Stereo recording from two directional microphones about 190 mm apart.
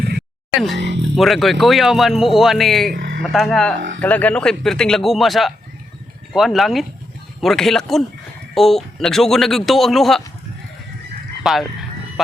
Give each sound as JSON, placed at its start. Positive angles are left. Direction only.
{"t": 0.8, "sound": "speech", "side_deg": -65}
{"t": 1.1, "sound": "speech", "side_deg": 0}
{"t": 2.9, "sound": "speech", "side_deg": -70}
{"t": 3.2, "sound": "speech", "side_deg": 0}
{"t": 3.8, "sound": "speech", "side_deg": -80}
{"t": 4.0, "sound": "speech", "side_deg": 10}
{"t": 11.4, "sound": "a sound", "side_deg": 0}